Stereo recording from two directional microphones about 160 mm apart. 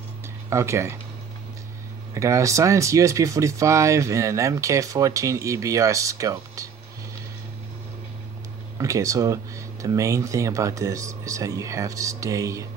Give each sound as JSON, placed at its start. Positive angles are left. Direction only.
{"t": 0.5, "sound": "speech", "side_deg": -20}
{"t": 2.1, "sound": "speech", "side_deg": -20}
{"t": 8.7, "sound": "speech", "side_deg": -20}